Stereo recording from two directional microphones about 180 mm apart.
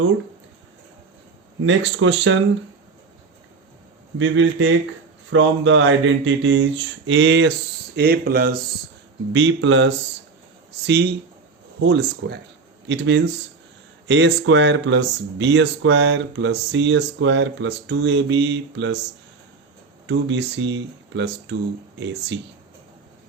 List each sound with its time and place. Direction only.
1.6 s speech: 90° right
4.2 s speech: 90° right
7.9 s speech: 55° right (ahead or behind)
9.3 s speech: 90° right
10.8 s speech: 70° right (ahead or behind)
12.9 s speech: 85° right
20.1 s speech: 75° right (ahead or behind)